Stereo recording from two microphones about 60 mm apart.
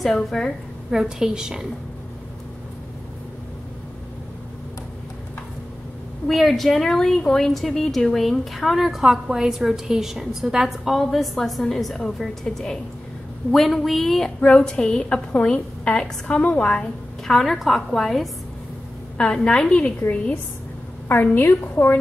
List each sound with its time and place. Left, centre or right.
0.0 s a woman's voice: centre
0.8 s a woman's voice: centre
6.2 s a woman's voice: centre
14.4 s a woman's voice: centre
17.3 s a woman's voice: centre
21.1 s a woman's voice: left